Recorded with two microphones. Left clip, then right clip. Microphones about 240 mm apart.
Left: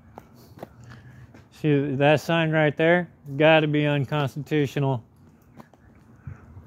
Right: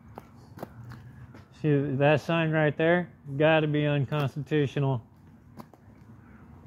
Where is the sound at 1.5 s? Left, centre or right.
Left.